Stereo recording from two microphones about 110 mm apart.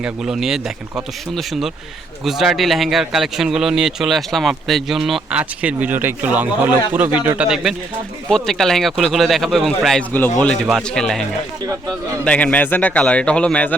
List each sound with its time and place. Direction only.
0.0 s speech: 5° right (ahead or behind)
2.2 s speech: centre (ahead or behind)
5.4 s a man's voice: 15° right (ahead or behind)
10.1 s a man's voice: 15° left (ahead or behind)
10.3 s speech: 5° left (ahead or behind)
12.2 s a man's voice: 10° left (ahead or behind)